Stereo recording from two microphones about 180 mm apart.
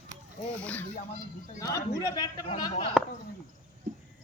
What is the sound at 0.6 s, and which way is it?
Speech, 10° left (ahead or behind).